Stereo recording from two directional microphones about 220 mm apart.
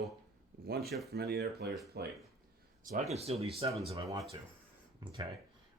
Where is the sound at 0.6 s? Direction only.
45° right (ahead or behind).